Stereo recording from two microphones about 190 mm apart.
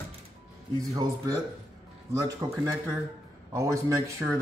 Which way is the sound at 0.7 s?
20° right (ahead or behind).